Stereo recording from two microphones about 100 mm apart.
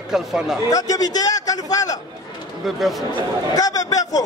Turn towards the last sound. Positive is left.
turn(degrees=35)  # may be behind; listen again after turning